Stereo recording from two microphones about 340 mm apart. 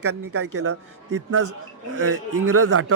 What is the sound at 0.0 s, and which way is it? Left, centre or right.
A man's voice, right.